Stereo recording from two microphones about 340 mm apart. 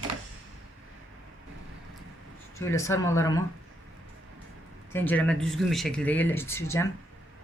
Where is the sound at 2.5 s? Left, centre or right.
Centre.